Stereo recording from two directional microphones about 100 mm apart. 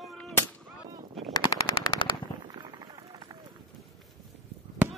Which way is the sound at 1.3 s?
40° left (ahead or behind).